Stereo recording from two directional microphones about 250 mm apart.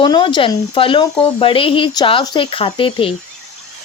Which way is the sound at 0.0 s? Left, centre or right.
Centre.